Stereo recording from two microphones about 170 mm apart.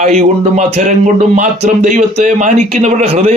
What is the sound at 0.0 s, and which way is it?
A man's voice, 40° right (ahead or behind).